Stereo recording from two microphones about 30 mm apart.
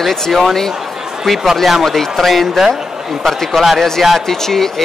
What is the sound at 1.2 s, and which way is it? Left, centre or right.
Speech, centre.